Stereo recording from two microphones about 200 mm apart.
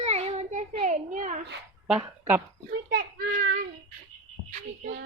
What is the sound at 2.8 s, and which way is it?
Child singing, 45° right (ahead or behind).